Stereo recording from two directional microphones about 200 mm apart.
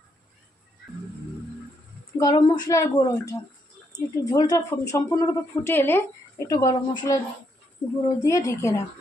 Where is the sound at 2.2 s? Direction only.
20° left (ahead or behind).